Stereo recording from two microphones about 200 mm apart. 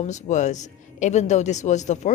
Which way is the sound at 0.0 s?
35° left (ahead or behind).